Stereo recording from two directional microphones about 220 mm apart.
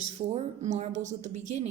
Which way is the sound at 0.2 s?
30° right (ahead or behind).